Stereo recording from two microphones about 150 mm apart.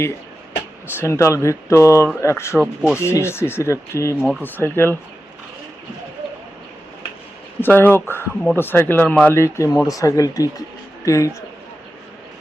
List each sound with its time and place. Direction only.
0.9 s speech: 20° left (ahead or behind)
4.2 s speech: 5° right (ahead or behind)
4.4 s speech: 10° left (ahead or behind)
7.6 s speech: 15° left (ahead or behind)
9.3 s speech: 20° left (ahead or behind)